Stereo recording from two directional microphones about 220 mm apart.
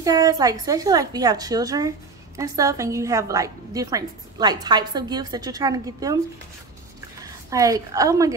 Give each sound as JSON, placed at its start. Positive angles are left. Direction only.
{"t": 0.0, "sound": "a woman's voice", "side_deg": -15}
{"t": 7.4, "sound": "a woman's voice", "side_deg": -15}